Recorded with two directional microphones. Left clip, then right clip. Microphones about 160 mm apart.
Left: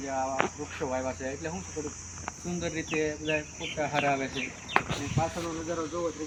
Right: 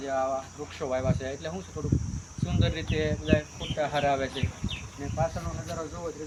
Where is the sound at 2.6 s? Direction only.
25° right (ahead or behind).